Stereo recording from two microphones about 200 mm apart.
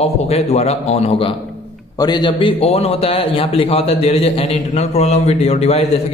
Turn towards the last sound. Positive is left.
turn(degrees=35)  # may be behind; listen again after turning